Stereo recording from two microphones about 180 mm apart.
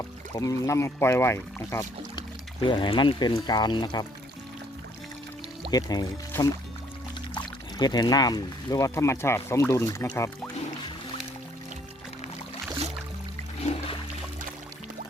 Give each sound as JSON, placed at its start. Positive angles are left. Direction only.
{"t": 0.0, "sound": "speech", "side_deg": 20}
{"t": 2.6, "sound": "speech", "side_deg": 25}
{"t": 5.7, "sound": "speech", "side_deg": 20}